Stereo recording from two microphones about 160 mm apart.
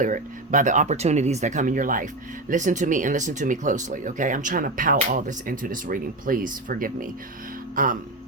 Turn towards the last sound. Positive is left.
turn(degrees=-60)  # may be behind; listen again after turning